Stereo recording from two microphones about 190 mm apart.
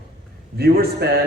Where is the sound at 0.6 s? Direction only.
55° right (ahead or behind).